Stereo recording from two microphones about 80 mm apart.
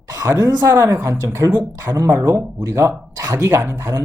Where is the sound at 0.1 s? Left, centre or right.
Right.